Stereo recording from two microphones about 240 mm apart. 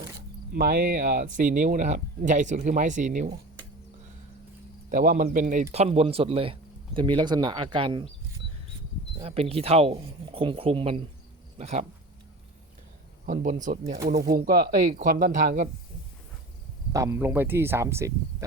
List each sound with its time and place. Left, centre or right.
0.5 s speech: right
4.9 s speech: right; by 8.0 s centre
9.1 s speech: right
13.2 s speech: right
16.9 s speech: centre